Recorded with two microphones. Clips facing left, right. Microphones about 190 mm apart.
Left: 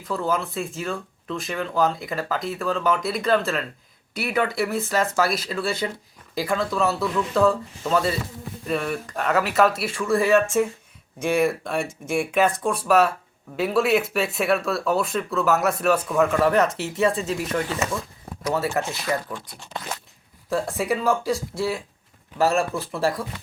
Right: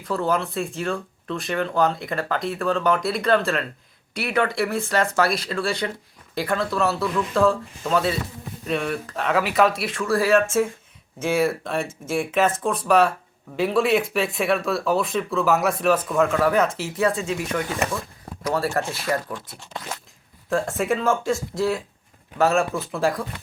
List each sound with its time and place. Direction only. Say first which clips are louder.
0.0 s speech: right 2 dB; centre (ahead or behind)
18.7 s speech: right 1 dB; centre (ahead or behind)
20.7 s speech: even; centre (ahead or behind)